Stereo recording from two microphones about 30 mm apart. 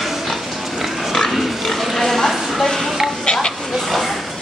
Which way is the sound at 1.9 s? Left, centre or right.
Centre.